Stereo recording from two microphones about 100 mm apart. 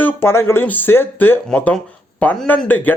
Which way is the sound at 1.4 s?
10° left (ahead or behind).